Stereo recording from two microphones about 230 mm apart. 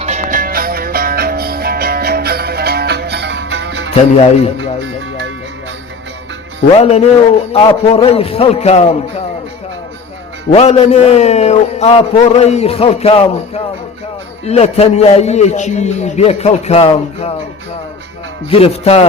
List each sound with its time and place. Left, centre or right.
0.0 s music: right
6.7 s a man's voice: left
10.5 s a man's voice: left
18.5 s a man's voice: left